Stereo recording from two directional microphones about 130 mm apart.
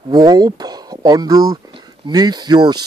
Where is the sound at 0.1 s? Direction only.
30° right (ahead or behind).